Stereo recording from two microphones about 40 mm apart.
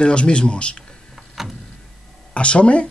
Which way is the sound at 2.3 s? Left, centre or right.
Left.